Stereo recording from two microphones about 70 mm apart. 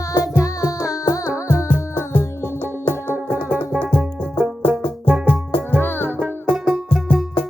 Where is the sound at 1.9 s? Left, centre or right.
Left.